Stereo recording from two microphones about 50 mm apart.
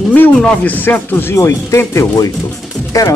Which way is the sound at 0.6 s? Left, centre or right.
Left.